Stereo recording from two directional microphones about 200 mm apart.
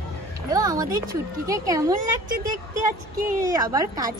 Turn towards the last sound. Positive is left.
turn(degrees=-20)  # may be behind; listen again after turning